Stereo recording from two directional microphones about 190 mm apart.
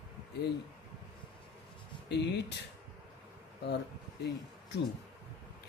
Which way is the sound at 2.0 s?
60° left (ahead or behind).